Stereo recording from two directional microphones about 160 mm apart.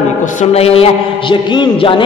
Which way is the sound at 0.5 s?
40° left (ahead or behind).